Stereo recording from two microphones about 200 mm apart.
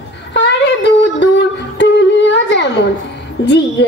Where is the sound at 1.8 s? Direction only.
60° left (ahead or behind).